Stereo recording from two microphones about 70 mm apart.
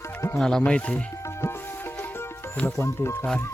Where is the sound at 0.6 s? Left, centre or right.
Centre.